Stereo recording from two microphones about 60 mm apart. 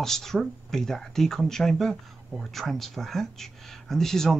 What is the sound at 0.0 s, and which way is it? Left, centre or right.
Speech, centre.